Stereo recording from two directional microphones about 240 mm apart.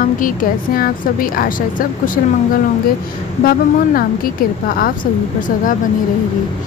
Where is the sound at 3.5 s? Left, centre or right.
Left.